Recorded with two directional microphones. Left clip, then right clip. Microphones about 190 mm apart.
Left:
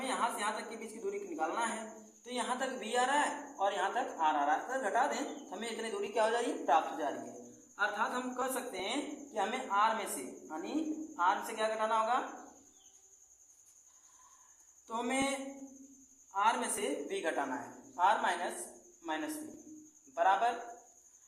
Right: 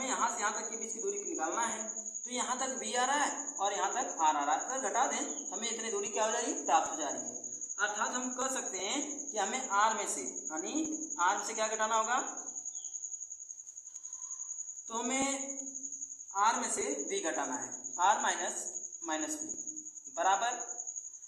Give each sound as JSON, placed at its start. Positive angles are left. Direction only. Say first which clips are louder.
{"t": 0.0, "sound": "a sound", "louder": "right 1 dB", "side_deg": 30}
{"t": 2.3, "sound": "a woman's voice", "louder": "even", "side_deg": 25}
{"t": 11.2, "sound": "a woman's voice", "louder": "even", "side_deg": 20}
{"t": 14.9, "sound": "a man's voice", "louder": "even", "side_deg": 30}
{"t": 16.3, "sound": "a woman's voice", "louder": "right 1 dB", "side_deg": 25}
{"t": 20.1, "sound": "a woman's voice", "louder": "left 1 dB", "side_deg": 20}